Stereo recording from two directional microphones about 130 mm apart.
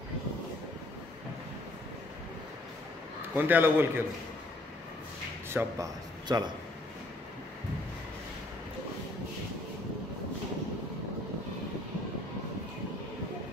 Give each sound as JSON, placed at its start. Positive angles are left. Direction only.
{"t": 3.3, "sound": "a man's voice", "side_deg": -15}
{"t": 5.5, "sound": "a man's voice", "side_deg": -20}
{"t": 6.2, "sound": "a man's voice", "side_deg": -35}